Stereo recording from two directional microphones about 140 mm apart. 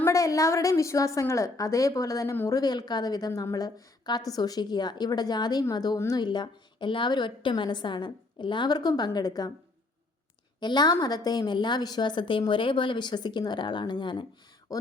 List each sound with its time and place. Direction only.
0.0 s a woman's voice: 25° left (ahead or behind)
10.6 s a woman's voice: 30° left (ahead or behind)